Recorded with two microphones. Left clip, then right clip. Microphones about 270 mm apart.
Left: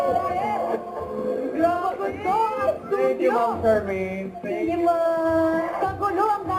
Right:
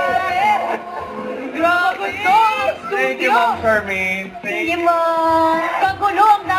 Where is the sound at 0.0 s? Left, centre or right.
Centre.